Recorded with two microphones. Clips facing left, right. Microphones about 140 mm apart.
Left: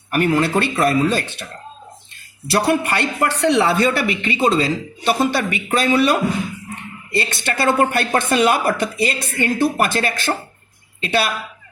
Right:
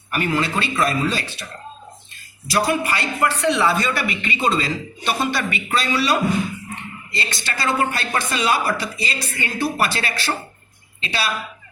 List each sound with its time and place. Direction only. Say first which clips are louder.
0.1 s a woman's voice: left 5 dB; 50° left (ahead or behind)
2.5 s a woman's voice: left 3 dB; 65° left (ahead or behind)